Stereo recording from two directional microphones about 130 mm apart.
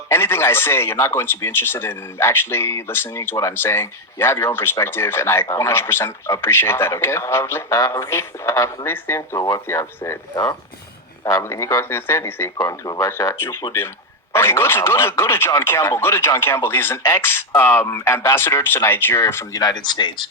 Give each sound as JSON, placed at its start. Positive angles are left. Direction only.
{"t": 0.1, "sound": "speech", "side_deg": 20}
{"t": 12.5, "sound": "speech", "side_deg": 30}